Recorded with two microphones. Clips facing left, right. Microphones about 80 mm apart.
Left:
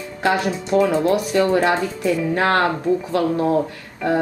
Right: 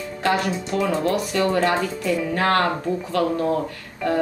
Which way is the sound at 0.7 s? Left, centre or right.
Left.